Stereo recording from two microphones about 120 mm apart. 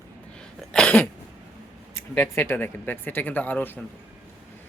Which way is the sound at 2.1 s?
15° left (ahead or behind).